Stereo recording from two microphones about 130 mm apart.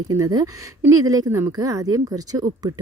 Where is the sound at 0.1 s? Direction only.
30° right (ahead or behind).